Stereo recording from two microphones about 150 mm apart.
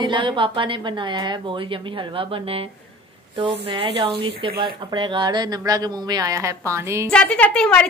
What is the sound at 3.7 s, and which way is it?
Speech, 35° right (ahead or behind).